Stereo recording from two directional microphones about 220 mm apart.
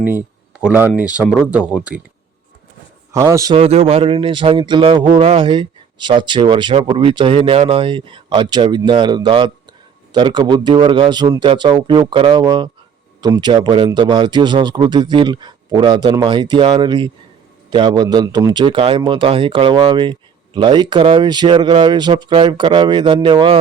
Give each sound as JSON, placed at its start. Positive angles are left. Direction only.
{"t": 0.0, "sound": "speech", "side_deg": -5}
{"t": 3.1, "sound": "a man's voice", "side_deg": -15}